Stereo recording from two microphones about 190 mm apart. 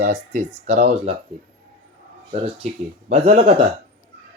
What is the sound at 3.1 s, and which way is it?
Speech, 35° right (ahead or behind).